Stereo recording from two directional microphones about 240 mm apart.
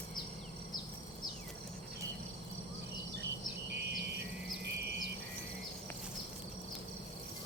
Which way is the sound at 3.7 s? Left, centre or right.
Right.